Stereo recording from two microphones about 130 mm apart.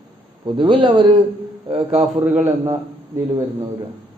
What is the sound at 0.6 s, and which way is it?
Speech, 40° right (ahead or behind).